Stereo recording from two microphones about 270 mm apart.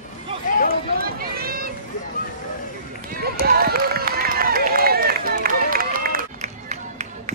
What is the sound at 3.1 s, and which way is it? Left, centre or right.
Run, right.